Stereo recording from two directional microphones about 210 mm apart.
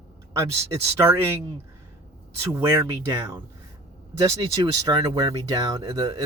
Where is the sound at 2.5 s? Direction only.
15° right (ahead or behind).